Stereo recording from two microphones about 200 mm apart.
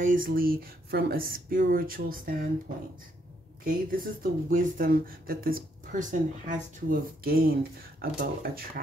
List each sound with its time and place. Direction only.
0.0 s speech: 45° right (ahead or behind)
3.6 s speech: 45° right (ahead or behind)